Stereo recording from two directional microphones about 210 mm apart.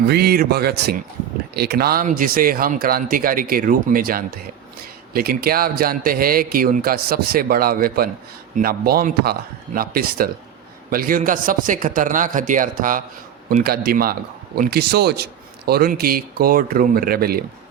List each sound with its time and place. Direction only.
0.1 s a man's voice: 50° right (ahead or behind)